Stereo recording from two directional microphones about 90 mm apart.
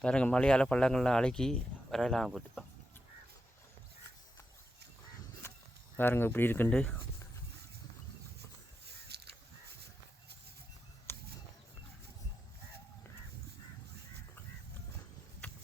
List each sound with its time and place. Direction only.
0.0 s speech: 10° left (ahead or behind)
6.0 s speech: 25° left (ahead or behind)
11.1 s a sound: 20° left (ahead or behind)